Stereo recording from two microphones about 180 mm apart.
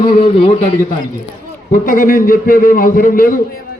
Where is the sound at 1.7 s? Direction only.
50° left (ahead or behind).